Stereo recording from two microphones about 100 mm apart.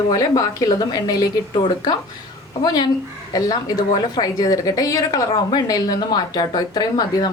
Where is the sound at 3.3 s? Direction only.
40° left (ahead or behind).